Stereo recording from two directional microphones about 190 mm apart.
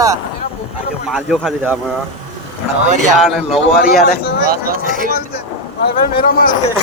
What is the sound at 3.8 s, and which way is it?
Speech, 50° left (ahead or behind).